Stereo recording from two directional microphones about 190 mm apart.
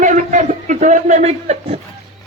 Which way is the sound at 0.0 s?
40° right (ahead or behind).